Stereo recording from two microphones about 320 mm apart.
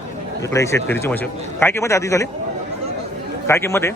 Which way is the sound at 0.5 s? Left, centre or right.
Centre.